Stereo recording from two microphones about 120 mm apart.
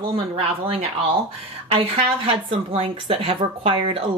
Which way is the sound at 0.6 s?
55° right (ahead or behind).